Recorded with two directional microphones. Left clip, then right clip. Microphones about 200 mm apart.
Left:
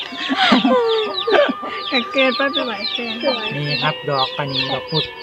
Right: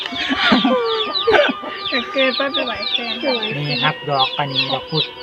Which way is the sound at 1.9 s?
60° left (ahead or behind).